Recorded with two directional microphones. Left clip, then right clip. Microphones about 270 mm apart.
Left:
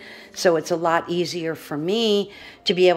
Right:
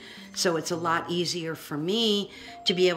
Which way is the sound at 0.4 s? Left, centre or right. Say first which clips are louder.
Left 8 dB; centre.